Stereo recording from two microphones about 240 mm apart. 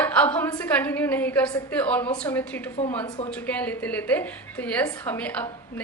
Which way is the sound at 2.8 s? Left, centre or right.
Left.